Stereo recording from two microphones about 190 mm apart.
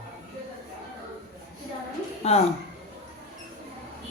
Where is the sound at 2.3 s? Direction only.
35° left (ahead or behind).